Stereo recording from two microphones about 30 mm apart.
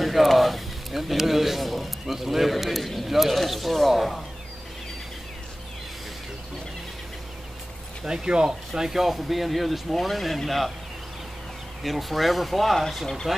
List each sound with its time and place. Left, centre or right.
0.0 s a sound: centre
2.1 s speech: centre
8.0 s speech: right; by 10.7 s centre
11.8 s speech: centre